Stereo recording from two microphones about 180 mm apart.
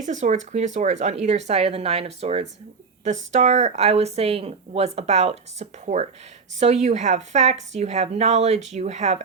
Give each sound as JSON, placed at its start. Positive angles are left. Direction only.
{"t": 0.0, "sound": "speech", "side_deg": -40}